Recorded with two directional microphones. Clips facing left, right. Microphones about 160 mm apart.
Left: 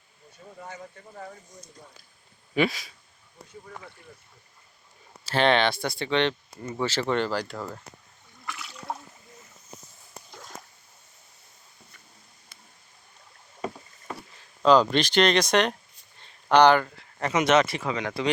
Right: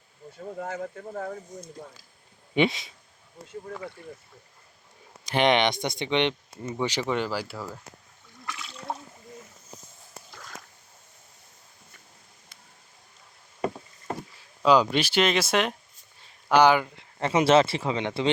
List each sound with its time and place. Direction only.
0.3 s speech: 70° right (ahead or behind)
2.6 s speech: 20° right (ahead or behind)
5.2 s speech: 15° right (ahead or behind)
14.6 s speech: 10° right (ahead or behind)
16.2 s a sound: 5° right (ahead or behind)
17.2 s speech: 30° right (ahead or behind)